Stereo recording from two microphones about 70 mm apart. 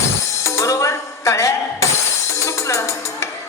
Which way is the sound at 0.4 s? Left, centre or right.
Left.